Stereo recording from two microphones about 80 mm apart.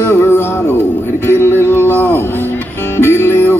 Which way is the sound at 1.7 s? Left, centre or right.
Left.